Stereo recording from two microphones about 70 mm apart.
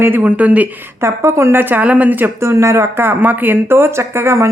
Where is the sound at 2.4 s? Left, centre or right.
Right.